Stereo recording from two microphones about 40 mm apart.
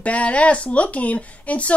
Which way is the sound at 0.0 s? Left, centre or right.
Left.